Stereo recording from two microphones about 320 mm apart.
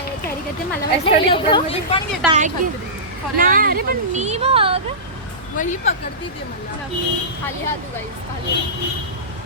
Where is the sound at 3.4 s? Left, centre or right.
Right.